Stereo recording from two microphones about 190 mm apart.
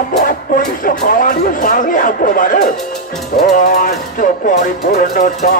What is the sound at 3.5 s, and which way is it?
Speech, 45° left (ahead or behind).